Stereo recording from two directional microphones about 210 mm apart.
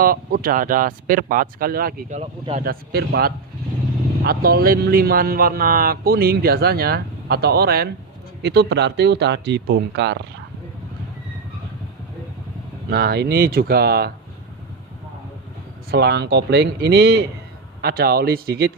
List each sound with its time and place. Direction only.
0.0 s speech: 45° right (ahead or behind)
12.9 s speech: 50° right (ahead or behind)
15.9 s speech: 50° right (ahead or behind)